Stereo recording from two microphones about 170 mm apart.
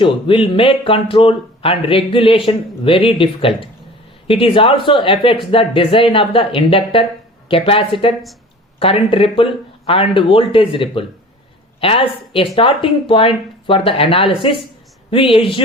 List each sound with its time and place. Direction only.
0.0 s speech: 30° left (ahead or behind)